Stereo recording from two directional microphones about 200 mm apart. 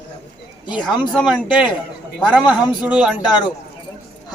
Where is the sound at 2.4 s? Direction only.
20° left (ahead or behind).